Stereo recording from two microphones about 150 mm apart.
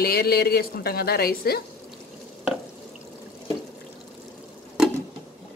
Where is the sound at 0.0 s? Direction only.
90° left.